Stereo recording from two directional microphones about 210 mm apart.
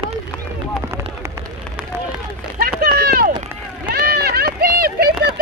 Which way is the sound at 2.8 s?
45° right (ahead or behind).